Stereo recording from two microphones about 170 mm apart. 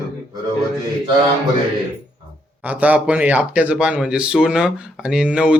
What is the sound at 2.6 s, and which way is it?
Speech, 10° right (ahead or behind).